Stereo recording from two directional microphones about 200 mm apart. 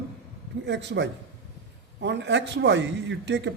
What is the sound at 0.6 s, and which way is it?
A man's voice, 60° right (ahead or behind).